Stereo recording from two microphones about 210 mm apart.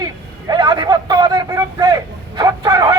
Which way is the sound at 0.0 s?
20° right (ahead or behind).